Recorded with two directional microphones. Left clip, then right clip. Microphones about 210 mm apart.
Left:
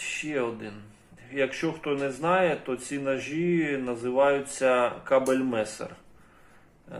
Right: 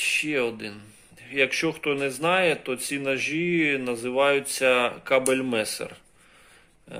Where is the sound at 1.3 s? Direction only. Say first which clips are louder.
Right 4 dB; 75° right (ahead or behind).